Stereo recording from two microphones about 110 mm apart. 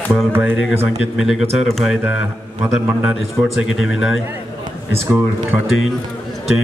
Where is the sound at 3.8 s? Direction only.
5° right (ahead or behind).